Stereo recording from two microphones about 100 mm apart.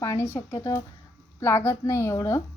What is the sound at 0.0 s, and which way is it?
A woman's voice, 30° left (ahead or behind).